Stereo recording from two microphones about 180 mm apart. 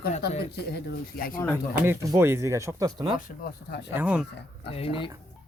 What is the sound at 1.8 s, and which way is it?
Speech, 15° right (ahead or behind).